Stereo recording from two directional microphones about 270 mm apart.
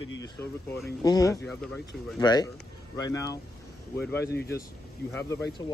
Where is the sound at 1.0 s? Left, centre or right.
Centre.